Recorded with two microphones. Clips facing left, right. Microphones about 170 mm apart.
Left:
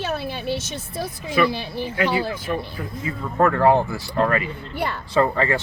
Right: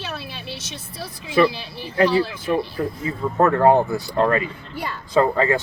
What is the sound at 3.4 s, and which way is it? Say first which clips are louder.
Speech: right 1 dB; 20° right (ahead or behind).